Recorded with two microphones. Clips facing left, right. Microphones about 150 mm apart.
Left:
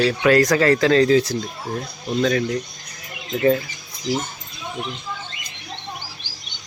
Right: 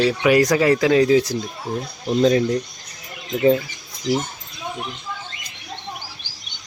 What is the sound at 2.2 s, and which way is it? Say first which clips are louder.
Speech: right 4 dB; 30° right (ahead or behind).